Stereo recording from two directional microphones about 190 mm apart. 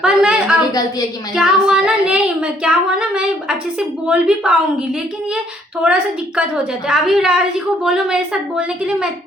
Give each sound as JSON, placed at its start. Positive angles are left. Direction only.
{"t": 0.0, "sound": "a sound", "side_deg": -5}
{"t": 0.7, "sound": "a woman's voice", "side_deg": 20}
{"t": 1.4, "sound": "speech", "side_deg": -5}
{"t": 5.8, "sound": "speech", "side_deg": -5}